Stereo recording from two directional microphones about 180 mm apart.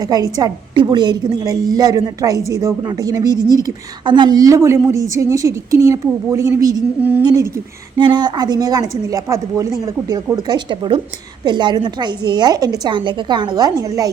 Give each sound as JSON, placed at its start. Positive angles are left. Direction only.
{"t": 0.0, "sound": "a woman's voice", "side_deg": -20}